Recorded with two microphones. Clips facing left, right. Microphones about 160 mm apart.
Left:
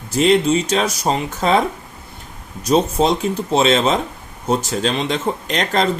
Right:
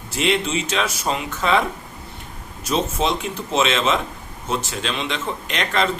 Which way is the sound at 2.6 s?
40° left (ahead or behind).